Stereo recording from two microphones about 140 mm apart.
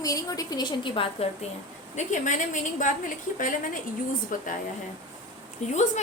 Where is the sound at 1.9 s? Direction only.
60° left (ahead or behind).